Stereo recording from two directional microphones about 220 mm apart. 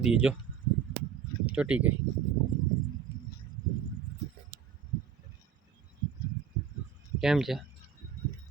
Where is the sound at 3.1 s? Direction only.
10° right (ahead or behind).